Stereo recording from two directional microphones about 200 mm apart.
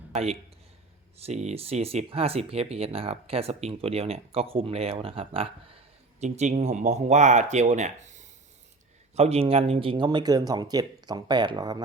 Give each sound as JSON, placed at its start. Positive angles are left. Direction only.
{"t": 0.1, "sound": "a man's voice", "side_deg": -30}